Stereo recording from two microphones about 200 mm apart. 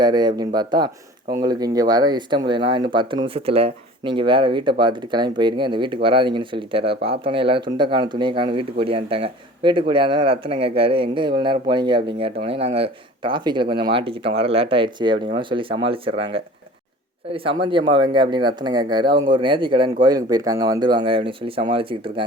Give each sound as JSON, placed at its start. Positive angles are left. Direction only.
{"t": 0.0, "sound": "speech", "side_deg": -20}